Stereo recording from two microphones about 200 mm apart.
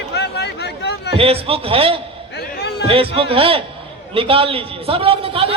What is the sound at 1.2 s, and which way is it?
Speech, 30° right (ahead or behind).